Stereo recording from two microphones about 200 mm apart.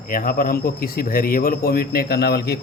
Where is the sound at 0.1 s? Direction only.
45° left (ahead or behind).